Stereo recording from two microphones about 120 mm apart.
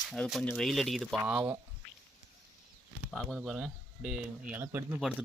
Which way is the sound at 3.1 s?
5° left (ahead or behind).